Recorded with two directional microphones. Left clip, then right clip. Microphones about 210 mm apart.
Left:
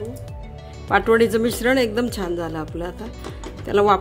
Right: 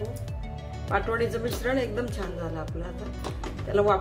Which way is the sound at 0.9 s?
55° left (ahead or behind).